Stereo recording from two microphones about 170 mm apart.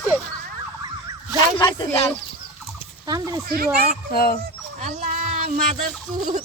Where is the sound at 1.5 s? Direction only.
25° left (ahead or behind).